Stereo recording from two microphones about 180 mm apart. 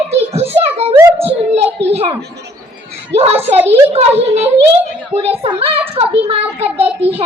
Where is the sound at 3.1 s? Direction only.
35° right (ahead or behind).